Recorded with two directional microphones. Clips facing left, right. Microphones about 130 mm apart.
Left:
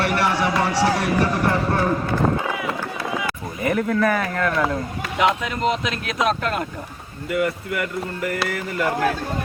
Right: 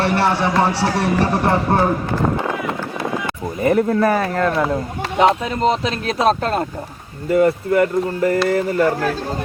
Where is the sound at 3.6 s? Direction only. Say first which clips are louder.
Right 5 dB; 30° right (ahead or behind).